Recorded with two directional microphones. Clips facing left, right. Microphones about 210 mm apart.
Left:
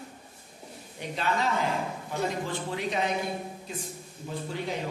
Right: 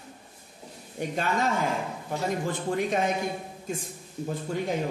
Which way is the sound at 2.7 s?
50° right (ahead or behind).